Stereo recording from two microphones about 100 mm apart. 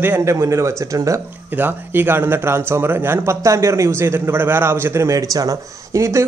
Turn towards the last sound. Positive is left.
turn(degrees=-30)  # may be behind; listen again after turning